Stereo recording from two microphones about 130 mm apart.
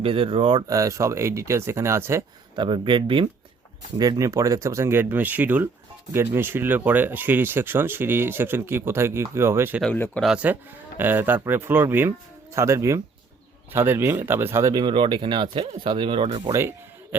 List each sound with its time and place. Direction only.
0.0 s speech: 45° right (ahead or behind)
0.7 s speech: 25° right (ahead or behind)
2.6 s speech: 35° right (ahead or behind); by 9.8 s 20° right (ahead or behind)
9.8 s speech: 10° left (ahead or behind)
10.2 s speech: 10° right (ahead or behind)
14.7 s speech: 35° right (ahead or behind)
16.5 s a man's voice: 20° right (ahead or behind)